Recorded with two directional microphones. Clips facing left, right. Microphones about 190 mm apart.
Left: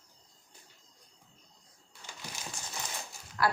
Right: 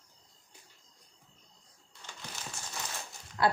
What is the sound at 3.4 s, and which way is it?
Speech, 25° right (ahead or behind).